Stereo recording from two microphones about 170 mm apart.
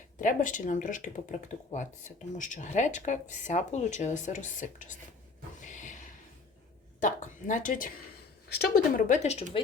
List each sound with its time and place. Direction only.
0.2 s speech: 50° left (ahead or behind)
5.5 s music: 45° left (ahead or behind)
7.0 s speech: 50° left (ahead or behind)
8.4 s speech: 65° left (ahead or behind); by 9.4 s 40° left (ahead or behind)